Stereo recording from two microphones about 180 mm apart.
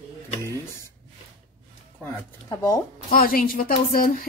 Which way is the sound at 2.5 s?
20° left (ahead or behind).